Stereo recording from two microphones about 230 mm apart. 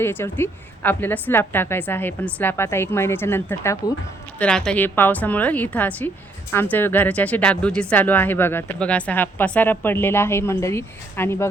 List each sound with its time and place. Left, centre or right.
0.0 s speech: centre